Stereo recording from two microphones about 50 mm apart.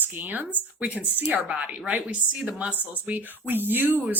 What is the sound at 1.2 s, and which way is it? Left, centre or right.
A woman's voice, right.